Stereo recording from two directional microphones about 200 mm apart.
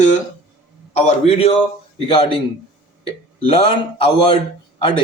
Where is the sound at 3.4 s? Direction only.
25° left (ahead or behind).